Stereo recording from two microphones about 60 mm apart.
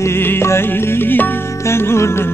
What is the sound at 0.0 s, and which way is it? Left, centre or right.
Music, left.